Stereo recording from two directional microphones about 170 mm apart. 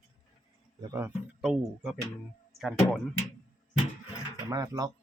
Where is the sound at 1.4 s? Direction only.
Centre (ahead or behind).